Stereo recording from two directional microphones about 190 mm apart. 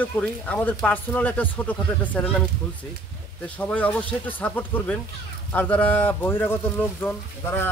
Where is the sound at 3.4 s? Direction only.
10° left (ahead or behind).